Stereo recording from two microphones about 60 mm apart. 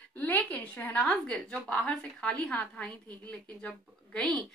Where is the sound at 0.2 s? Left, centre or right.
Left.